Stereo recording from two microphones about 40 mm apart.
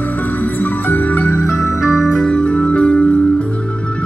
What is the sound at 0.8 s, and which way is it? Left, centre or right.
Music, left.